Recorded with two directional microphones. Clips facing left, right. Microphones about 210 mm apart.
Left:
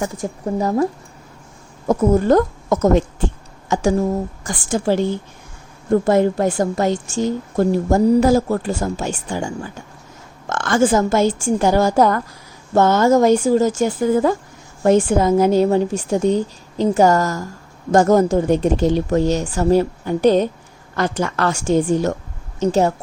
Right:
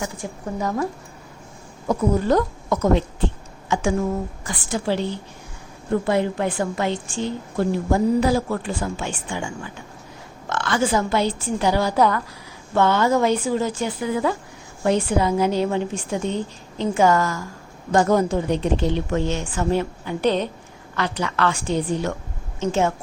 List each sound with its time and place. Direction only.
0.0 s a woman's voice: 40° left (ahead or behind)
1.9 s a woman's voice: 50° left (ahead or behind)